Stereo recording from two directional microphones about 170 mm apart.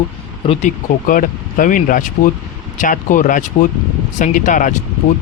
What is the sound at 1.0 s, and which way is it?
Speech, 55° left (ahead or behind).